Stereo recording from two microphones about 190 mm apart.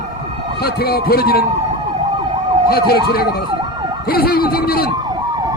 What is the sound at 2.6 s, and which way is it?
Speech, 55° left (ahead or behind).